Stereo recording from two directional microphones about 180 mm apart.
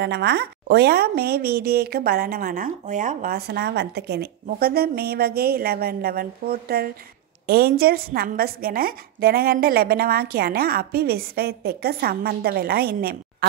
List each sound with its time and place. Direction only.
0.0 s a woman's voice: 70° right (ahead or behind)